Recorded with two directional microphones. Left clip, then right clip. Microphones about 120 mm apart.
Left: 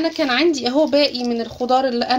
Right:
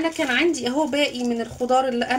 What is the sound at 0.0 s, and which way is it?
Speech, 30° left (ahead or behind).